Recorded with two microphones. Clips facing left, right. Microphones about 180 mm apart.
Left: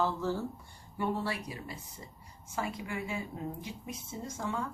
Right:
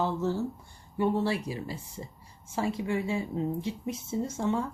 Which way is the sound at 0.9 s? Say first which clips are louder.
Right 6 dB; 25° right (ahead or behind).